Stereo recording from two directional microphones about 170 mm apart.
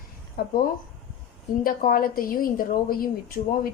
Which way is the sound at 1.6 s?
55° left (ahead or behind).